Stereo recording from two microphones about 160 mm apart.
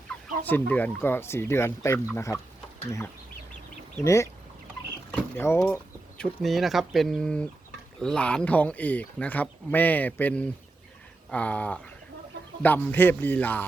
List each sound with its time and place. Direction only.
0.1 s chicken: 5° left (ahead or behind)
0.4 s speech: 10° left (ahead or behind)
3.9 s speech: 15° left (ahead or behind)
6.1 s speech: centre (ahead or behind)